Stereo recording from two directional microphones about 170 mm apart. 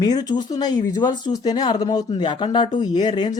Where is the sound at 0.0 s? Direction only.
25° left (ahead or behind).